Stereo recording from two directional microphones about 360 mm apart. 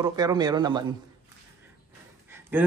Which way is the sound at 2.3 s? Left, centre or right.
Centre.